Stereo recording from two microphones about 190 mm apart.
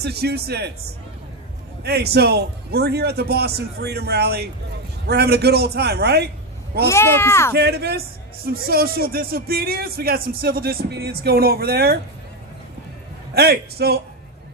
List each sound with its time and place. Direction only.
0.0 s a man's voice: 60° right (ahead or behind)
1.8 s a man's voice: 60° right (ahead or behind)
6.8 s speech: 15° left (ahead or behind)
7.5 s a man's voice: 60° right (ahead or behind)
13.3 s a man's voice: 55° right (ahead or behind)